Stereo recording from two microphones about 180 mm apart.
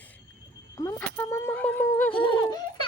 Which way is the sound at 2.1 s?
25° left (ahead or behind).